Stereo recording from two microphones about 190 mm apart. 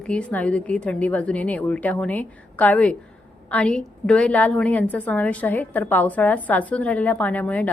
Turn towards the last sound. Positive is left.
turn(degrees=10)  # may be behind; listen again after turning